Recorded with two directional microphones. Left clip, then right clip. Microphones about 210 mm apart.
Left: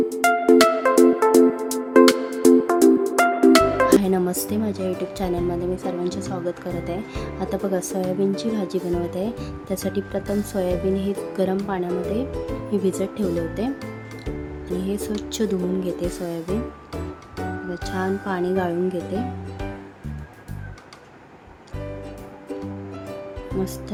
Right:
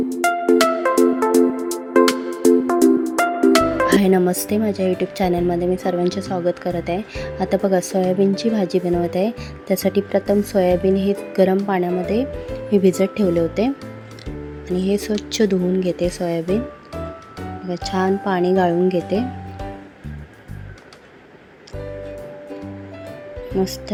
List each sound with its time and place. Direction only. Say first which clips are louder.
0.1 s music: right 1 dB; centre (ahead or behind)
3.9 s speech: right 3 dB; 20° right (ahead or behind)
14.8 s speech: right 7 dB; 20° right (ahead or behind)
17.7 s speech: right 8 dB; 20° right (ahead or behind)